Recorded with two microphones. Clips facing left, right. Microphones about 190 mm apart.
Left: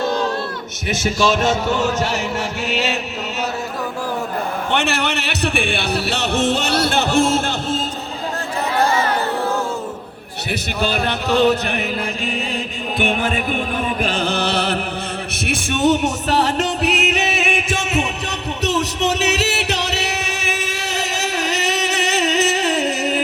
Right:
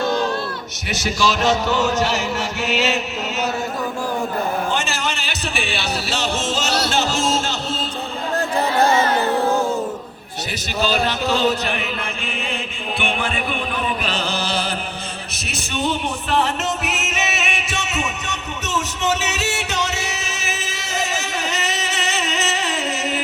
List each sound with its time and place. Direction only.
1.2 s music: 50° left (ahead or behind)
4.7 s music: 65° left (ahead or behind)
8.8 s a sound: 25° right (ahead or behind)
10.5 s speech: 55° left (ahead or behind)
13.0 s music: 45° left (ahead or behind); by 14.8 s 65° left (ahead or behind)
15.4 s music: 50° left (ahead or behind); by 17.2 s 35° left (ahead or behind)
17.2 s music: 55° left (ahead or behind)
18.3 s music: 35° left (ahead or behind)
19.7 s music: 70° left (ahead or behind)
21.0 s a sound: 35° left (ahead or behind)
21.9 s music: 65° left (ahead or behind)
22.2 s music: 35° left (ahead or behind)